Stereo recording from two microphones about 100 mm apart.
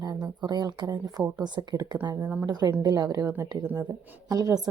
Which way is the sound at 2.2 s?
15° right (ahead or behind).